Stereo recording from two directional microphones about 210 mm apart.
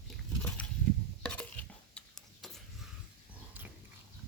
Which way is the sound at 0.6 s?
5° left (ahead or behind).